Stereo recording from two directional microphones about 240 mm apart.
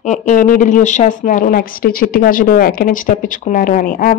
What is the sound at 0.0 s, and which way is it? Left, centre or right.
Speech, left.